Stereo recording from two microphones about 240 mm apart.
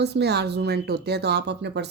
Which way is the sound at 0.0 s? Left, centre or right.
Right.